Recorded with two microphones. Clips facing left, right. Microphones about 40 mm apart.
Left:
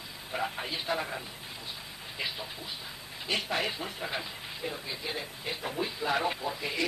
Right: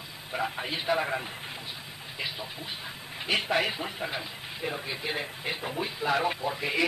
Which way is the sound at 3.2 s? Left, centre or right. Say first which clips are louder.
Right 4 dB; right.